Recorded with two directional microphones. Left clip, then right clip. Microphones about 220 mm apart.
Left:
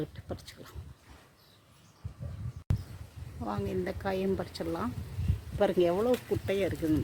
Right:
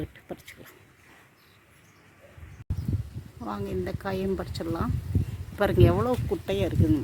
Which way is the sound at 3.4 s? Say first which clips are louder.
Right 2 dB; 5° right (ahead or behind).